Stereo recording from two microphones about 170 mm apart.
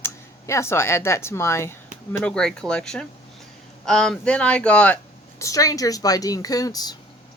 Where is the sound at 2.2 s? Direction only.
5° left (ahead or behind).